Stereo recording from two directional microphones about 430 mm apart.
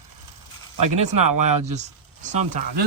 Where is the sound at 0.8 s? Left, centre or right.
Right.